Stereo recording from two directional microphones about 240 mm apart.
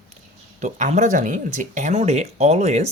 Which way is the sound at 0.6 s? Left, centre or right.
Right.